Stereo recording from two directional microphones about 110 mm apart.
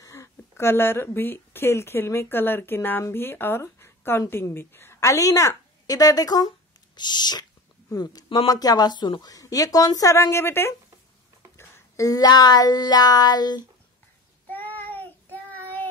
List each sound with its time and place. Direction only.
0.0 s a woman's voice: 25° left (ahead or behind)
14.5 s child singing: 15° left (ahead or behind)